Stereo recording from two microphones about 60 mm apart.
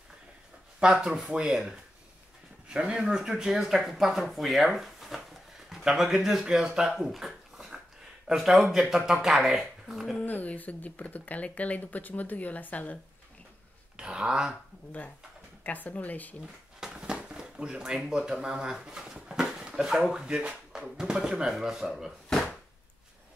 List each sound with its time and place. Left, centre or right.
1.0 s speech: centre
10.2 s speech: left
13.9 s speech: centre
15.6 s speech: left
16.8 s speech: centre
22.3 s a sound: centre